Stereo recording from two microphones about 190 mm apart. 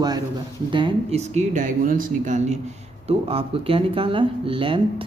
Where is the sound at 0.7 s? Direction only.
25° right (ahead or behind).